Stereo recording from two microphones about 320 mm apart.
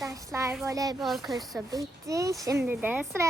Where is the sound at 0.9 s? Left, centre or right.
Centre.